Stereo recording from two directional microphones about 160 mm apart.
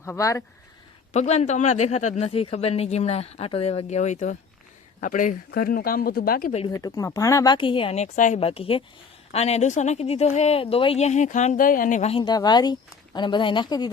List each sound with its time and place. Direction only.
0.0 s speech: 20° left (ahead or behind)
1.1 s a man's voice: 45° left (ahead or behind); by 6.5 s 65° left (ahead or behind)
6.7 s speech: 20° left (ahead or behind); by 8.4 s 50° left (ahead or behind)
8.4 s a man's voice: 35° left (ahead or behind)
12.1 s speech: 25° left (ahead or behind)